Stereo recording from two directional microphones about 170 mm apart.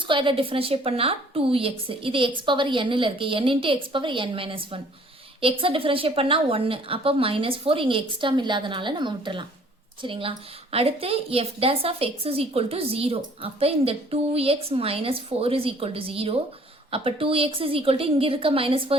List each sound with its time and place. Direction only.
0.1 s a woman's voice: 30° right (ahead or behind)